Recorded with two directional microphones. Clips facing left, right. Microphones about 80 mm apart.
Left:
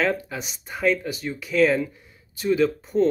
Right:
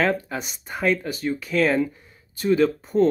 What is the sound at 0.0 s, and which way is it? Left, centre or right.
Speech, centre.